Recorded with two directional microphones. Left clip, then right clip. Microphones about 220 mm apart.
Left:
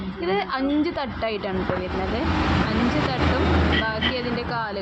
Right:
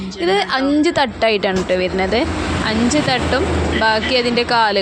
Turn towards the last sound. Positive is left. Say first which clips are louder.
# right 12 dB
turn(degrees=-35)  # may be behind; listen again after turning